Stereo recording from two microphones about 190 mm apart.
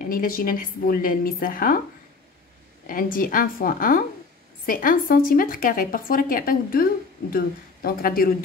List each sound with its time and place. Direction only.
0.0 s a woman's voice: 50° left (ahead or behind)
2.9 s a woman's voice: 45° left (ahead or behind)